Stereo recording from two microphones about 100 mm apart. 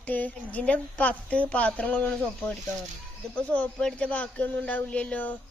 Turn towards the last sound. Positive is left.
turn(degrees=15)  # may be behind; listen again after turning